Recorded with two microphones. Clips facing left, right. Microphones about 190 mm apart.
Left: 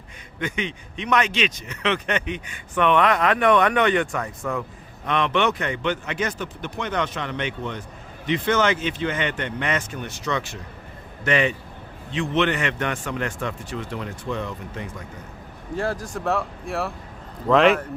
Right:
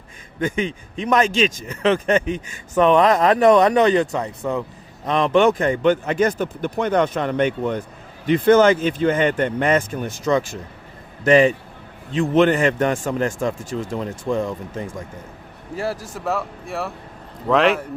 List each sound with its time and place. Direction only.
1.0 s speech: 40° right (ahead or behind)
15.7 s speech: 5° right (ahead or behind)